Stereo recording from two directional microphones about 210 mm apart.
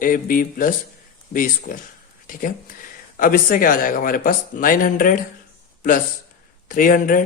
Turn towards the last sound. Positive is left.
turn(degrees=40)  # may be behind; listen again after turning